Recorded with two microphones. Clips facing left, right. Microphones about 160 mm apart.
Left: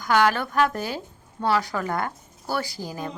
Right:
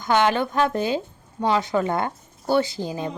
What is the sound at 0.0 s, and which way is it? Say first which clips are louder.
A woman's voice: right 1 dB; 25° right (ahead or behind).